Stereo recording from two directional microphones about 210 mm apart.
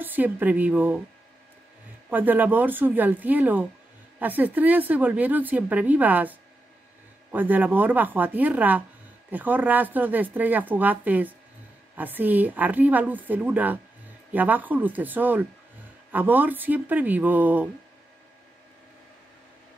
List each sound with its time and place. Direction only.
0.0 s speech: 10° right (ahead or behind)
2.0 s speech: 10° right (ahead or behind)